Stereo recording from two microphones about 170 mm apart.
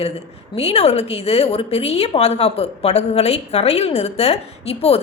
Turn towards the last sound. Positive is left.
turn(degrees=35)  # may be behind; listen again after turning